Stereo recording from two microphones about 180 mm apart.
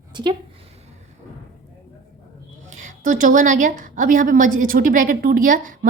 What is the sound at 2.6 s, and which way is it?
A woman's voice, 45° right (ahead or behind).